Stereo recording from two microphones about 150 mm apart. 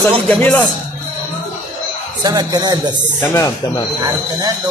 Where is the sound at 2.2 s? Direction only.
30° right (ahead or behind).